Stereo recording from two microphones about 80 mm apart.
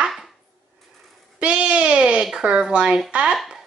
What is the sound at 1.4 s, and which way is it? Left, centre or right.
Speech, centre.